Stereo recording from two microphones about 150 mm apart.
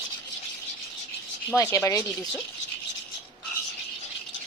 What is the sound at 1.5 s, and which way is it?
Speech, 20° left (ahead or behind).